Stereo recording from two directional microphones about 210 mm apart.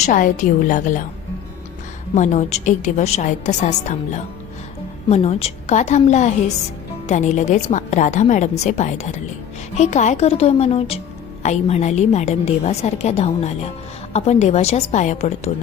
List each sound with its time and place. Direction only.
0.0 s a woman's voice: 40° left (ahead or behind)
2.1 s a woman's voice: 35° left (ahead or behind)